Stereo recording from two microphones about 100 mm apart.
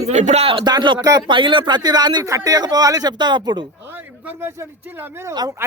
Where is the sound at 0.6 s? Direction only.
45° right (ahead or behind).